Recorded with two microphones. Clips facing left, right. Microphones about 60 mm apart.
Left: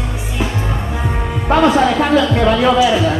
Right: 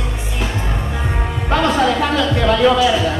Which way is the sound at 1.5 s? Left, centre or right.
Centre.